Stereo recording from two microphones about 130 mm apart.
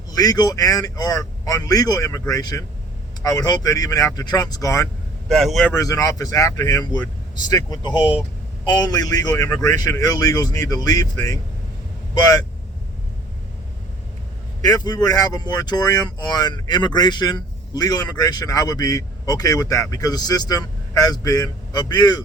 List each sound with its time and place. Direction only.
0.2 s speech: 30° left (ahead or behind)
5.3 s speech: centre (ahead or behind)
5.7 s speech: 25° left (ahead or behind)
14.6 s speech: 30° left (ahead or behind)